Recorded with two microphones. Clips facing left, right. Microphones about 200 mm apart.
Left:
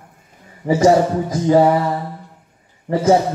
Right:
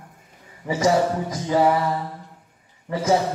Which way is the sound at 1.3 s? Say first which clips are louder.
Left 9 dB; 30° left (ahead or behind).